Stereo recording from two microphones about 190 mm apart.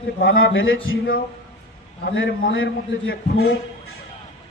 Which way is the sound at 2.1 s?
75° left (ahead or behind).